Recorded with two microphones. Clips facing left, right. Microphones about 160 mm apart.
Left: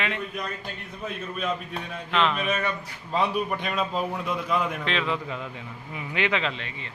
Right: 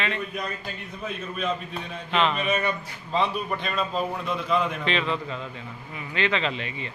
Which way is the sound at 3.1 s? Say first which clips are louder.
Even; 10° left (ahead or behind).